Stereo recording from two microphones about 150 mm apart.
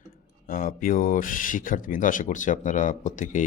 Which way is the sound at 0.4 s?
70° left (ahead or behind).